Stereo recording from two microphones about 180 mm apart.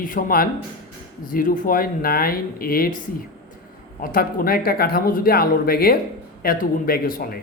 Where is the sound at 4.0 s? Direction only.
55° left (ahead or behind).